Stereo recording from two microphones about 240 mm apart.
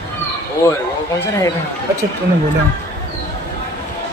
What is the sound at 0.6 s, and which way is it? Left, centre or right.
Speech, centre.